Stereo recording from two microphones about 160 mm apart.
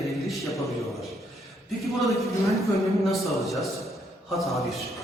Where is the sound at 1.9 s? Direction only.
Centre (ahead or behind).